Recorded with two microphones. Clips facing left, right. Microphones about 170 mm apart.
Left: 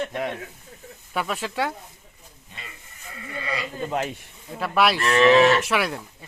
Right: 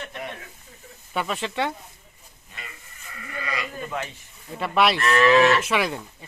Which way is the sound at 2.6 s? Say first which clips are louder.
Right 1 dB; 30° left (ahead or behind).